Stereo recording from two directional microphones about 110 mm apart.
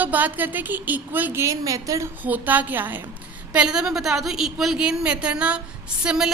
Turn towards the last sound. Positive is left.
turn(degrees=-5)  # may be behind; listen again after turning